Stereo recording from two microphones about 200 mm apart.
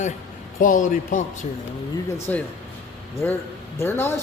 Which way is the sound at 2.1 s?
10° left (ahead or behind).